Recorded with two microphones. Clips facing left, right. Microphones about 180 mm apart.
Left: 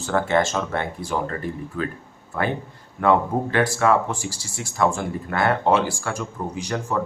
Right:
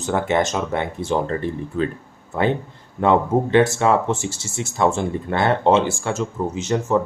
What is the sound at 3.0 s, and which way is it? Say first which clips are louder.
Speech: right 2 dB; 20° right (ahead or behind).